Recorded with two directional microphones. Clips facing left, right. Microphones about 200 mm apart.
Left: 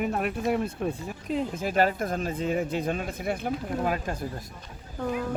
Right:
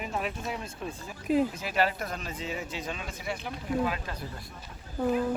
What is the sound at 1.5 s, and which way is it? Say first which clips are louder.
Speech: left 4 dB; 50° left (ahead or behind).